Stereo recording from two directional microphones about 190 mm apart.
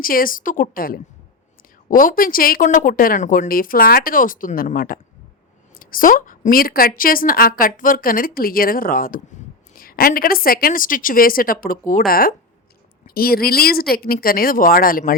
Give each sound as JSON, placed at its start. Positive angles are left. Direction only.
{"t": 0.0, "sound": "a woman's voice", "side_deg": 50}